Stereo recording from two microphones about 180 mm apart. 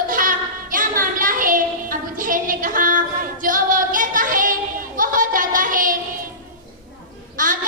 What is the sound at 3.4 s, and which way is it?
Female singing, 50° right (ahead or behind).